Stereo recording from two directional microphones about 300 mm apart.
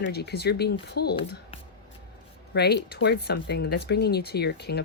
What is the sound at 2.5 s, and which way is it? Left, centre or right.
A woman's voice, left.